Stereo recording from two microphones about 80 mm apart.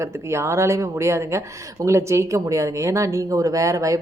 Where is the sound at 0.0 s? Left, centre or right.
Right.